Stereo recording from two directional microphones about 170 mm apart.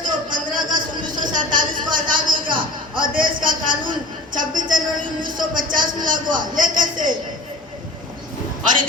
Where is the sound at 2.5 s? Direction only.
30° right (ahead or behind).